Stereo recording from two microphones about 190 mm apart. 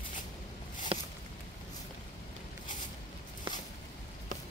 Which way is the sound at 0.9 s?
30° right (ahead or behind).